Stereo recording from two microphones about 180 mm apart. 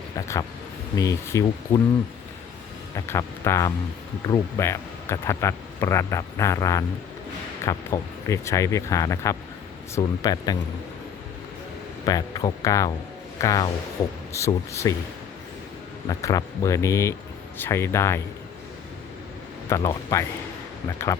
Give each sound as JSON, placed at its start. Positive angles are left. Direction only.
{"t": 0.2, "sound": "speech", "side_deg": 20}
{"t": 2.9, "sound": "speech", "side_deg": 15}
{"t": 12.0, "sound": "speech", "side_deg": 20}
{"t": 16.0, "sound": "speech", "side_deg": 20}
{"t": 19.9, "sound": "speech", "side_deg": 20}